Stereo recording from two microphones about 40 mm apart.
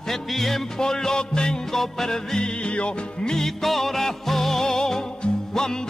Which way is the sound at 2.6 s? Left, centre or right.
Left.